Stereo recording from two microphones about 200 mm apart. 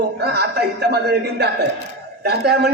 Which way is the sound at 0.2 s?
55° right (ahead or behind).